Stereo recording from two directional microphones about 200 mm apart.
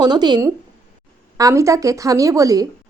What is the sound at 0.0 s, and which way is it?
A woman's voice, 20° right (ahead or behind).